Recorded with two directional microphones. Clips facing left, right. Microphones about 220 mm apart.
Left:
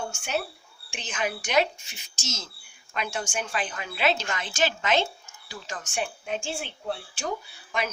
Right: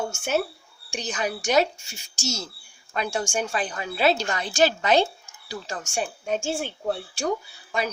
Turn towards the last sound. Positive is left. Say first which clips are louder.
# right 3 dB
turn(degrees=-35)  # may be behind; listen again after turning